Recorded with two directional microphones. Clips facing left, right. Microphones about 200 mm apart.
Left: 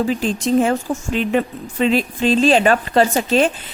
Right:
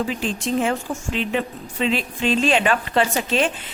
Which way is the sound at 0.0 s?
40° left (ahead or behind).